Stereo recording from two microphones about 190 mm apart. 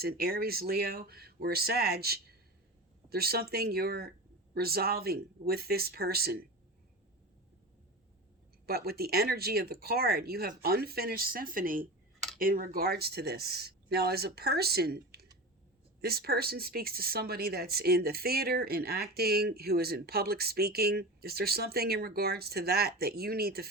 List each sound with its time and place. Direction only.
0.0 s speech: 55° right (ahead or behind)
8.6 s speech: 55° right (ahead or behind)